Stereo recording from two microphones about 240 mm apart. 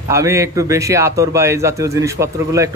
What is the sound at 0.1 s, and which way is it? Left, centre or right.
A man's voice, centre.